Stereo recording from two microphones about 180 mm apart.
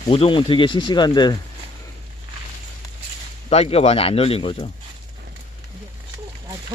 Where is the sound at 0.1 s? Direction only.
30° left (ahead or behind).